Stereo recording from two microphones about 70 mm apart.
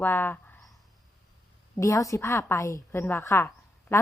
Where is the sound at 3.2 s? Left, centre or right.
Left.